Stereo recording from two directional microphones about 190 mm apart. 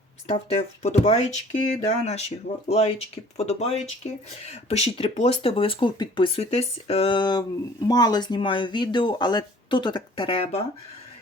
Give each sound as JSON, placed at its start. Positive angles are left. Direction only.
{"t": 0.3, "sound": "speech", "side_deg": 35}